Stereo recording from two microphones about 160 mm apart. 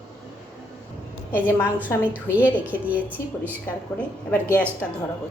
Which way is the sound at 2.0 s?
10° right (ahead or behind).